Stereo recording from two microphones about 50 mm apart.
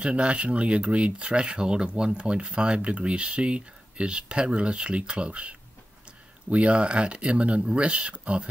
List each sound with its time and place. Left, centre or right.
0.0 s speech: right